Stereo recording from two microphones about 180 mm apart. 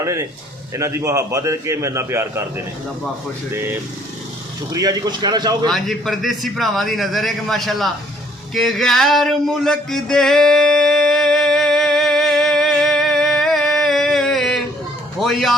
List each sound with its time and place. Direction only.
0.0 s a man's voice: 15° right (ahead or behind)
3.5 s a man's voice: 10° right (ahead or behind)
5.6 s a man's voice: centre (ahead or behind)
8.5 s a sound: centre (ahead or behind)
15.2 s a man's voice: centre (ahead or behind)